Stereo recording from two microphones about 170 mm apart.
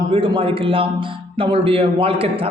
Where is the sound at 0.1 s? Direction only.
30° right (ahead or behind).